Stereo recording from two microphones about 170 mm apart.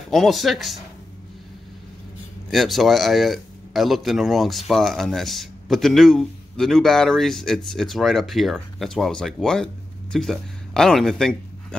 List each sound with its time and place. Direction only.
0.1 s speech: centre (ahead or behind)
2.5 s speech: centre (ahead or behind)